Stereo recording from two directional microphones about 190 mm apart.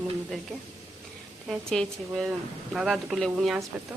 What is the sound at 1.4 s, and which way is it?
Speech, centre (ahead or behind).